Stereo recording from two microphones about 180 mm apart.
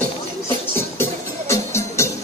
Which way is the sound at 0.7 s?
15° left (ahead or behind).